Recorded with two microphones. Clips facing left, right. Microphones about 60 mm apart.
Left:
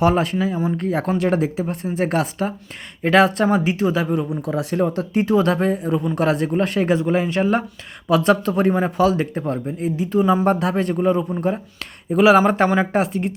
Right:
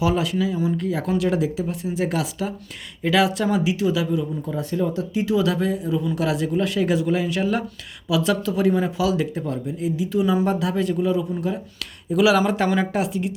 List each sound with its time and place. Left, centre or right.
0.0 s a man's voice: left
4.3 s a man's voice: left